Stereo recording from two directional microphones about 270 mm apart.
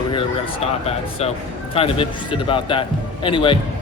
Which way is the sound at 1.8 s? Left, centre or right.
Centre.